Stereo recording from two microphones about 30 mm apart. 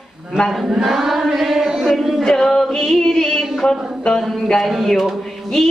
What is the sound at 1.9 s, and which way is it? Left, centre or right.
Music, centre.